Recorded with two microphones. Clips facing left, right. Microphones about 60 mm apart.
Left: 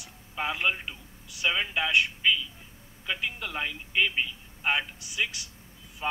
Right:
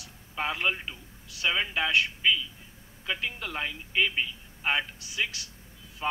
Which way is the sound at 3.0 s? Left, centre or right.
Centre.